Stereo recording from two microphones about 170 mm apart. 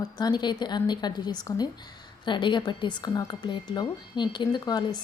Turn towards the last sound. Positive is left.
turn(degrees=25)  # may be behind; listen again after turning